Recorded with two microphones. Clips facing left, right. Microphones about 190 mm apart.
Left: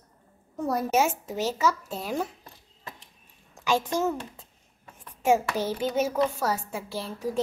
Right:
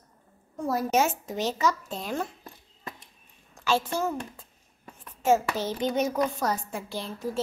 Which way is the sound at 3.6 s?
15° left (ahead or behind).